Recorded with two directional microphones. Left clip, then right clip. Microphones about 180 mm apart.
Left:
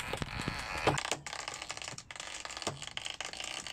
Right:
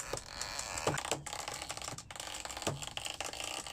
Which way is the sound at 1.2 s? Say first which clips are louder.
Left 1 dB; 35° right (ahead or behind).